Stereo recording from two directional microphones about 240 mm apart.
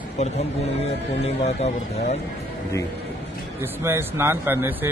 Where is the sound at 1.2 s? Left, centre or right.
Left.